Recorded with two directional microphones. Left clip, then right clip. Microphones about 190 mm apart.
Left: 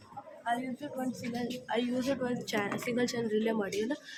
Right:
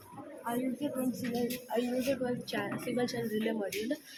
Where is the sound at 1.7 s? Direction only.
30° left (ahead or behind).